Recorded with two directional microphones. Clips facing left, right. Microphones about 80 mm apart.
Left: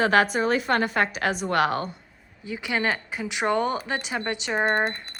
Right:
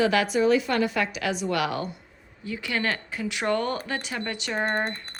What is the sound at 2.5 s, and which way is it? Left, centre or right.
A woman's voice, centre.